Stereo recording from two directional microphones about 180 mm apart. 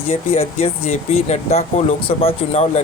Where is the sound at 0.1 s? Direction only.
35° left (ahead or behind).